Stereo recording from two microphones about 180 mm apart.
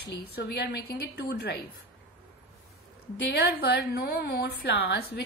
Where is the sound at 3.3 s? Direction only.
65° left (ahead or behind).